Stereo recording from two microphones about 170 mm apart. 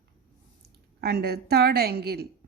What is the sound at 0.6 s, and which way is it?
A woman's voice, 70° right (ahead or behind).